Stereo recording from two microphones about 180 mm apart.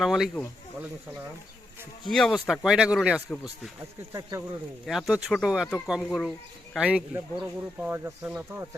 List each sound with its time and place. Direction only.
0.0 s speech: centre (ahead or behind)
2.0 s speech: centre (ahead or behind)
3.1 s a man's voice: 10° left (ahead or behind)
4.1 s speech: 15° right (ahead or behind)
4.9 s speech: centre (ahead or behind)